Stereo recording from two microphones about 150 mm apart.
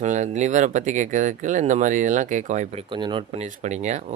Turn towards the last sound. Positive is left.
turn(degrees=-50)  # may be behind; listen again after turning